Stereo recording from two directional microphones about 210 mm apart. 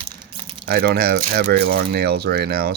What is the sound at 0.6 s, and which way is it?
Speech, 50° right (ahead or behind).